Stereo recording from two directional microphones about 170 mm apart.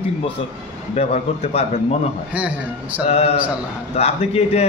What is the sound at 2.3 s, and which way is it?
Speech, 10° right (ahead or behind).